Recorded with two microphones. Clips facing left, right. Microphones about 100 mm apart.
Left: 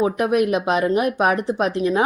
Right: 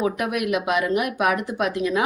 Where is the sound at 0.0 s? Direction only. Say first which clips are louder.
Left 5 dB; 35° left (ahead or behind).